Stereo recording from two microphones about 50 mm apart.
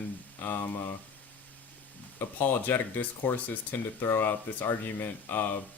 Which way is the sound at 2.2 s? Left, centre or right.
Left.